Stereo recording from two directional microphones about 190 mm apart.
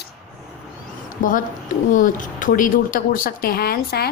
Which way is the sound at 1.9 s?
45° left (ahead or behind).